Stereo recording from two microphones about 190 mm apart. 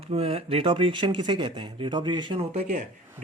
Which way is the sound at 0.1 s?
30° right (ahead or behind).